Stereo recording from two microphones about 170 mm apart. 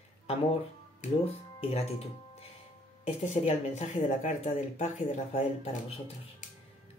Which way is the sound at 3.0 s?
40° left (ahead or behind).